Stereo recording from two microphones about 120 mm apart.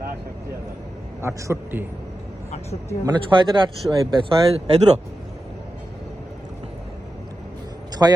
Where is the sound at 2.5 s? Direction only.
65° left (ahead or behind).